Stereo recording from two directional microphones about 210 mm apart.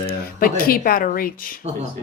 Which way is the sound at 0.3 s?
45° left (ahead or behind).